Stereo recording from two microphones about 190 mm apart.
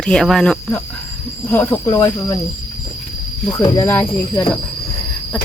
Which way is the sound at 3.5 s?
15° left (ahead or behind).